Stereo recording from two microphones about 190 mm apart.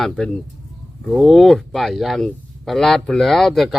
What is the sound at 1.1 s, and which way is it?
Speech, centre (ahead or behind).